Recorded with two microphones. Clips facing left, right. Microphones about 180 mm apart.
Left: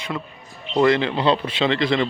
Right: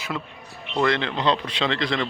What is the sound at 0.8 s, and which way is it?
Speech, 10° left (ahead or behind).